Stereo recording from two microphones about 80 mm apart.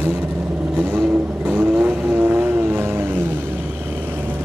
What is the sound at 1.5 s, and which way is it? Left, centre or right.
Vehicle, right.